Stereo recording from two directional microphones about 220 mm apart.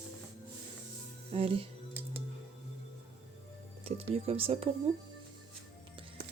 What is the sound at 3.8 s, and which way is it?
Speech, 25° right (ahead or behind).